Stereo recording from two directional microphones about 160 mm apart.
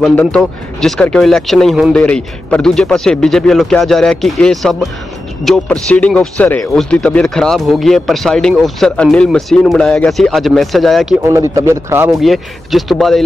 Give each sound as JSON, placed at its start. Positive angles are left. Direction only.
{"t": 0.1, "sound": "speech", "side_deg": 10}
{"t": 11.2, "sound": "a man's voice", "side_deg": -15}
{"t": 12.1, "sound": "speech", "side_deg": 0}